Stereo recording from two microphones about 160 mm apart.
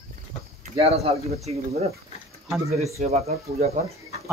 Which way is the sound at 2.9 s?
40° right (ahead or behind).